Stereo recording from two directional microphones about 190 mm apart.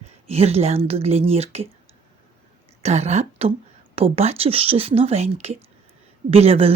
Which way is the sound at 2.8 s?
35° right (ahead or behind).